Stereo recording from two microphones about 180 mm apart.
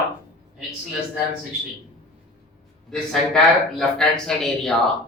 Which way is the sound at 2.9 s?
5° left (ahead or behind).